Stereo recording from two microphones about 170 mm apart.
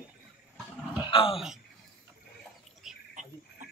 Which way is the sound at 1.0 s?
30° left (ahead or behind).